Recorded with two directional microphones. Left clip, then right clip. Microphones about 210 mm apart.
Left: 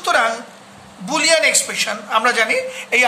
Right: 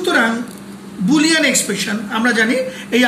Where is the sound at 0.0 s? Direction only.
55° left (ahead or behind).